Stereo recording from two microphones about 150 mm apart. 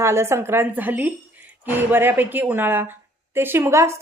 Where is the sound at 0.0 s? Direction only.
20° right (ahead or behind).